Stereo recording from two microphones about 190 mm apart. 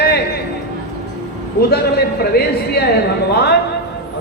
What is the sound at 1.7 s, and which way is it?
Speech, 55° left (ahead or behind).